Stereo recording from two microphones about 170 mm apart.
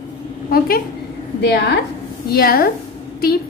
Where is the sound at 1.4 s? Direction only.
80° left.